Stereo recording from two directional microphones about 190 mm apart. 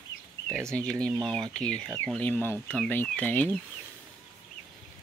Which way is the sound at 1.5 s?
5° left (ahead or behind).